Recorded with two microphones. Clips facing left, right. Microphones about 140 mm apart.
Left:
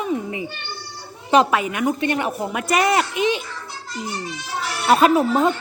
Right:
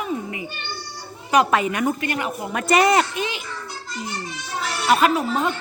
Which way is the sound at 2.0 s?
30° left (ahead or behind).